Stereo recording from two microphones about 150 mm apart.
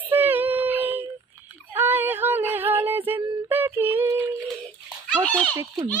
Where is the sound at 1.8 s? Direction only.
15° right (ahead or behind).